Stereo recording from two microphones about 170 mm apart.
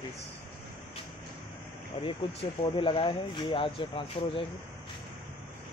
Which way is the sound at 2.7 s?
30° left (ahead or behind).